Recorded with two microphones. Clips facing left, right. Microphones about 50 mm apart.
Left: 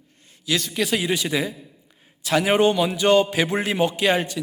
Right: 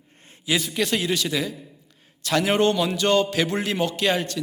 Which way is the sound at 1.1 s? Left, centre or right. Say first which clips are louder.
Left 1 dB; centre.